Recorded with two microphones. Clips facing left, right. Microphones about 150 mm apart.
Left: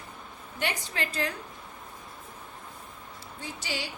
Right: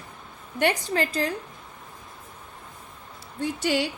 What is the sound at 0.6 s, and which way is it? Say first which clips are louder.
Speech: right 9 dB; 40° right (ahead or behind).